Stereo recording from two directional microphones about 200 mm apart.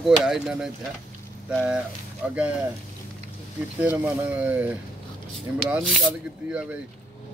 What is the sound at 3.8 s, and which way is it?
Speech, 10° right (ahead or behind).